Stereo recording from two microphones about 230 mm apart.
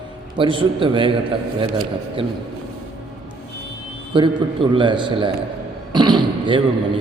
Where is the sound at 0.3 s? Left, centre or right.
Right.